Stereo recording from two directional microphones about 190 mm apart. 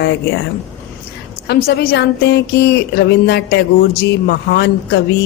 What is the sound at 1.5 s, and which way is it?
A woman's voice, 55° left (ahead or behind).